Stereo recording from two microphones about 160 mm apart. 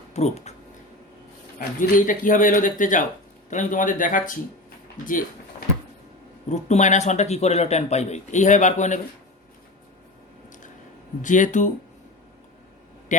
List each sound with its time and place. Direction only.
0.1 s speech: 45° left (ahead or behind)
1.5 s speech: 55° left (ahead or behind)
6.5 s speech: 45° left (ahead or behind)
11.2 s speech: 50° left (ahead or behind)
13.1 s a sound: 50° left (ahead or behind)